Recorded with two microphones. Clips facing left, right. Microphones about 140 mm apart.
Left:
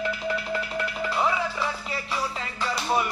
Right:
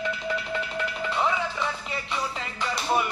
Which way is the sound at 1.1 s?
5° left (ahead or behind).